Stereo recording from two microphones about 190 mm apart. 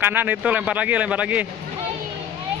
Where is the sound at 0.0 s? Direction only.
10° right (ahead or behind).